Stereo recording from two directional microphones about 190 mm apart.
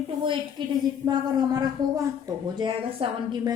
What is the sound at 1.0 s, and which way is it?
A woman's voice, 20° right (ahead or behind).